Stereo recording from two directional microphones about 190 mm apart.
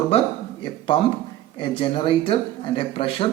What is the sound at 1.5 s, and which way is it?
A man's voice, 25° left (ahead or behind).